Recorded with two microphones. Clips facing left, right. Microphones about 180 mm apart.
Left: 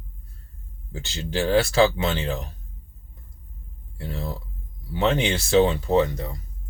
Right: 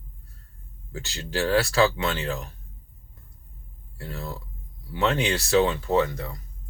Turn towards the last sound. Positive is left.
turn(degrees=25)  # may be behind; listen again after turning